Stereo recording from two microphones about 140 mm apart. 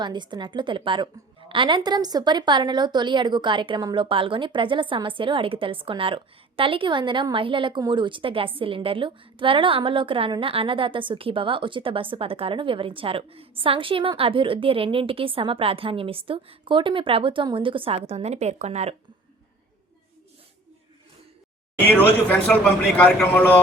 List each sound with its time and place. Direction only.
0.0 s a woman's voice: 30° right (ahead or behind)
18.1 s speech: 50° right (ahead or behind)
21.8 s speech: 10° left (ahead or behind)